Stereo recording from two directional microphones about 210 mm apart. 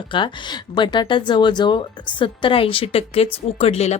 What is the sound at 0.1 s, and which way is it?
Speech, 20° left (ahead or behind).